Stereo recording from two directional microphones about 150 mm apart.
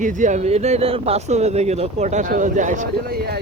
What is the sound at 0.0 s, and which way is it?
Speech, 55° right (ahead or behind).